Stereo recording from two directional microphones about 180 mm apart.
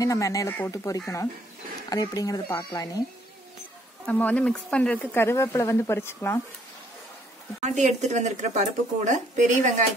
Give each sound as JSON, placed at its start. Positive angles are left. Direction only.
{"t": 0.0, "sound": "speech", "side_deg": 20}
{"t": 4.0, "sound": "speech", "side_deg": 10}
{"t": 7.6, "sound": "speech", "side_deg": -40}